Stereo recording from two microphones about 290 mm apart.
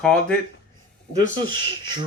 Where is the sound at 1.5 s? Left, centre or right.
Centre.